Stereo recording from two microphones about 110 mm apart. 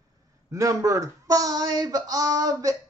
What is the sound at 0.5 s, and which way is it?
Speech, 30° right (ahead or behind).